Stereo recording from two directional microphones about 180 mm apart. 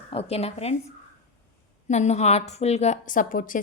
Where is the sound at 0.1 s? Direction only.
35° left (ahead or behind).